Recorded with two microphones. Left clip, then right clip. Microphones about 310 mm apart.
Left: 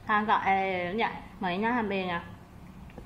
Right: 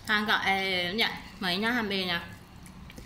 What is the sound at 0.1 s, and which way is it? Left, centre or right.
A woman's voice, centre.